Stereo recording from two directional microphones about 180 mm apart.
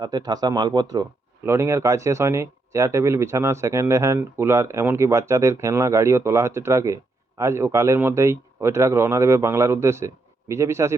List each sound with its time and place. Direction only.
0.0 s speech: 20° right (ahead or behind)